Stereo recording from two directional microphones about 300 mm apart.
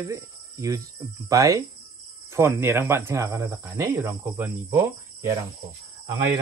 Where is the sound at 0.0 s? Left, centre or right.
Centre.